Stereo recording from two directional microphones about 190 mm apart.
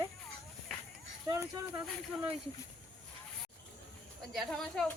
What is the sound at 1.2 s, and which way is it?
Speech, 20° right (ahead or behind).